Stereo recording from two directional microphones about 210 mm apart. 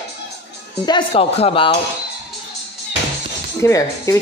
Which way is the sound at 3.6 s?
15° left (ahead or behind).